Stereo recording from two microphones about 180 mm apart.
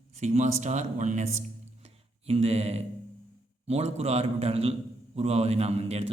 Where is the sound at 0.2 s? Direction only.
40° right (ahead or behind).